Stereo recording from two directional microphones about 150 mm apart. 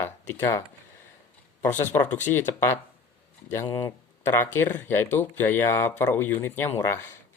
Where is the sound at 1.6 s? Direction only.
15° left (ahead or behind).